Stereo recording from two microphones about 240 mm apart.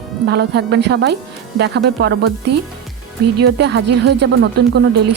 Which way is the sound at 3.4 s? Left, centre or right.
Right.